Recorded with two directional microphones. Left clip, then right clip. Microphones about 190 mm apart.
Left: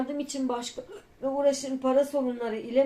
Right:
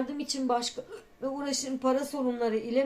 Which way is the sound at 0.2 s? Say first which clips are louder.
Right 2 dB; 40° right (ahead or behind).